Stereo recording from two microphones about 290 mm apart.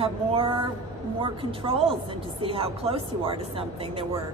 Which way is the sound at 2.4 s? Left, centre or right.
Centre.